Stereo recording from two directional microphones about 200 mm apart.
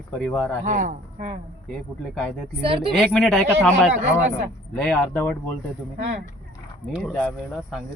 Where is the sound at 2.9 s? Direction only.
Centre (ahead or behind).